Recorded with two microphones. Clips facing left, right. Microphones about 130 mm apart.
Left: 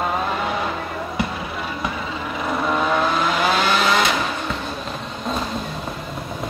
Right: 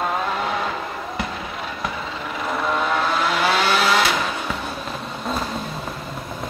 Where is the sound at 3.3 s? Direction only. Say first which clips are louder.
Even; centre (ahead or behind).